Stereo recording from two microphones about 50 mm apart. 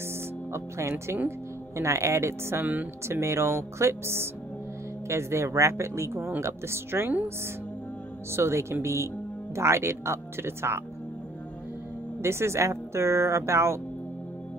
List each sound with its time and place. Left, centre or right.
0.5 s speech: right
1.8 s a woman's voice: right
2.6 s speech: right
3.1 s speech: right
5.0 s a woman's voice: right
8.3 s a woman's voice: right
12.2 s a woman's voice: right